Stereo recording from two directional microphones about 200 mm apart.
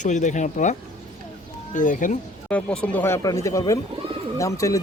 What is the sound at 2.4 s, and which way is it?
Speech, 5° left (ahead or behind).